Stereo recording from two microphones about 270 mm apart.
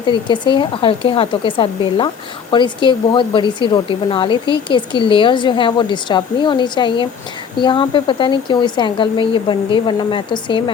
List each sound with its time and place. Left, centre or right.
0.0 s speech: centre